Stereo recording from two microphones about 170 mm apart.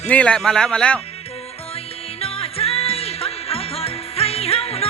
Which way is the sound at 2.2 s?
35° left (ahead or behind).